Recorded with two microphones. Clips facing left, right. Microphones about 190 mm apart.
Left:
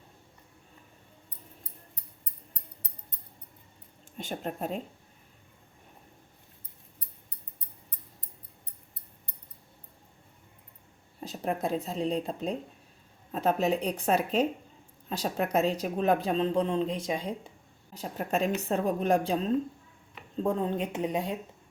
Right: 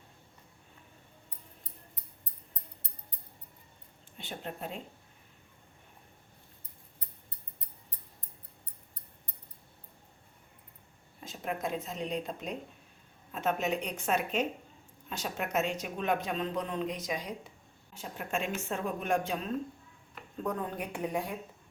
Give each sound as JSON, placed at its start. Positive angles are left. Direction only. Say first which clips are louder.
{"t": 4.2, "sound": "speech", "louder": "left 6 dB", "side_deg": 45}
{"t": 11.2, "sound": "a woman's voice", "louder": "left 5 dB", "side_deg": 35}
{"t": 17.9, "sound": "a woman's voice", "louder": "left 5 dB", "side_deg": 40}